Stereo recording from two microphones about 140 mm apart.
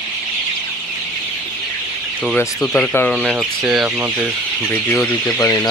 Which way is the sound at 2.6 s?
10° left (ahead or behind).